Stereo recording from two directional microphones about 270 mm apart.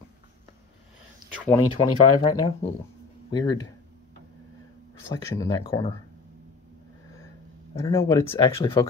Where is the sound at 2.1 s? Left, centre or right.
Centre.